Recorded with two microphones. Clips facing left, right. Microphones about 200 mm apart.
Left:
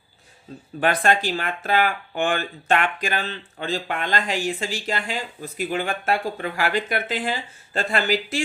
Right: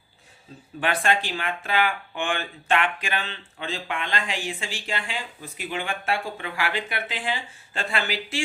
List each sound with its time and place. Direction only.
0.8 s speech: 40° left (ahead or behind)